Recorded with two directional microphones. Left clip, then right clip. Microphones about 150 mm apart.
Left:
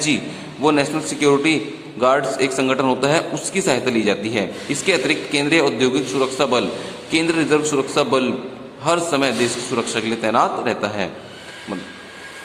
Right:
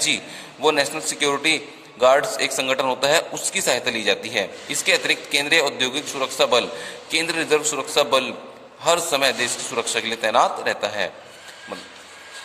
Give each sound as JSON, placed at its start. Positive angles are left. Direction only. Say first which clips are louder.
{"t": 0.6, "sound": "a man's voice", "louder": "left 2 dB", "side_deg": -35}